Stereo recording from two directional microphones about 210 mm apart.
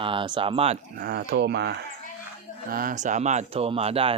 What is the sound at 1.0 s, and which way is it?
Speech, 50° right (ahead or behind).